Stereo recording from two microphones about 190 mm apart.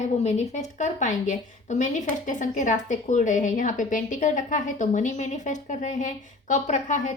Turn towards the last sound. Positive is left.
turn(degrees=40)  # may be behind; listen again after turning